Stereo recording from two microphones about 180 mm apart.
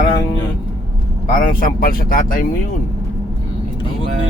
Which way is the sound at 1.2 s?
50° left (ahead or behind).